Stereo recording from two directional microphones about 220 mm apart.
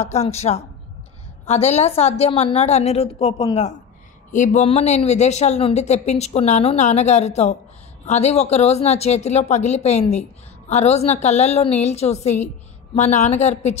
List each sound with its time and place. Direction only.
0.0 s a woman's voice: 30° left (ahead or behind)